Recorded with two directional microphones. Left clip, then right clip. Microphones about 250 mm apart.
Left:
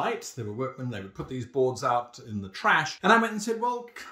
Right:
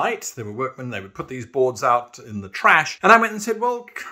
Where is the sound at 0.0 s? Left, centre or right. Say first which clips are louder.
Right 6 dB; centre.